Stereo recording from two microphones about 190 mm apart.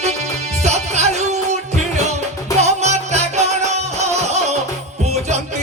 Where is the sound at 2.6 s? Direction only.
35° right (ahead or behind).